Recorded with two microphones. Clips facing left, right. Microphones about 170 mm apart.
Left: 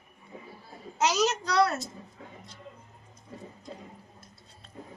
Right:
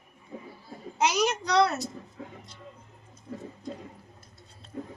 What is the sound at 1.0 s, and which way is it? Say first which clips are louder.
Speech: even; 15° right (ahead or behind).